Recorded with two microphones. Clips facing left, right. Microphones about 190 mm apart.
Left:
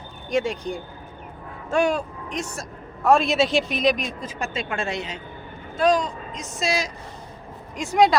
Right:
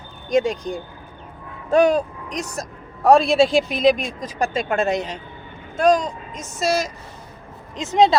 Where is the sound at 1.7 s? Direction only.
40° right (ahead or behind).